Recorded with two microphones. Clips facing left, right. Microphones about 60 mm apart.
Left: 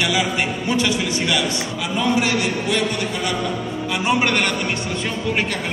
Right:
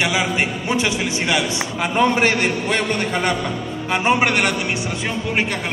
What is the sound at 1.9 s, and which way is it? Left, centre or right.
A man's voice, right.